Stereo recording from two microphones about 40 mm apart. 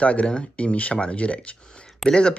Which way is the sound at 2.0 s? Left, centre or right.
Centre.